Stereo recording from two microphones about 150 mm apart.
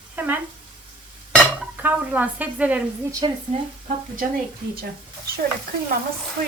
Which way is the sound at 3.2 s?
35° right (ahead or behind).